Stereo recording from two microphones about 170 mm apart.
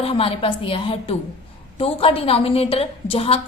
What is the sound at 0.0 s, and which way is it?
A woman's voice, 35° left (ahead or behind).